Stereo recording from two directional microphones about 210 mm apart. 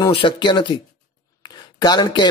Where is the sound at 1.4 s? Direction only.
20° left (ahead or behind).